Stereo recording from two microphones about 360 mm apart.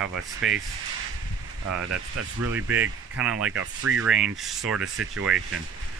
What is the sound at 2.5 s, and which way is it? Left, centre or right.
Speech, centre.